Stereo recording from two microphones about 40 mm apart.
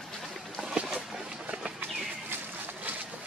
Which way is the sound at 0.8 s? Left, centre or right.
Right.